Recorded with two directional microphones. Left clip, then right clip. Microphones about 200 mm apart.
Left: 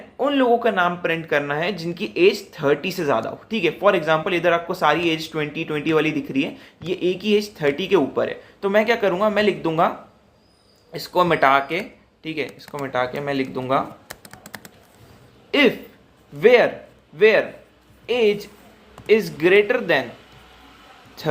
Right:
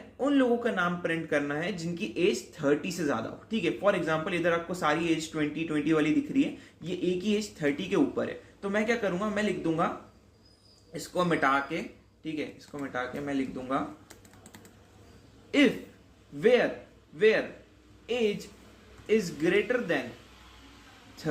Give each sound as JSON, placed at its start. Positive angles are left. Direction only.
{"t": 0.2, "sound": "speech", "side_deg": 10}
{"t": 10.9, "sound": "speech", "side_deg": 15}
{"t": 15.5, "sound": "speech", "side_deg": 10}